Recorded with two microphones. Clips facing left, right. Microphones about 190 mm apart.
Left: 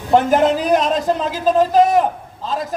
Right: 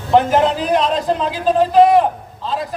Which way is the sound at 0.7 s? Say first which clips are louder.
Even; 45° left (ahead or behind).